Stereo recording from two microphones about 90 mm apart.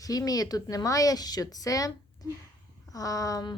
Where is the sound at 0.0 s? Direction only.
45° left (ahead or behind).